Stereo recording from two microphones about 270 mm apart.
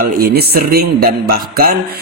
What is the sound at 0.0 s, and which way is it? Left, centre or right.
Speech, right.